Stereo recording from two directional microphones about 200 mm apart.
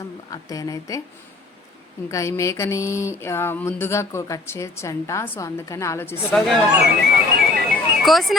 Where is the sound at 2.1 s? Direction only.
15° left (ahead or behind).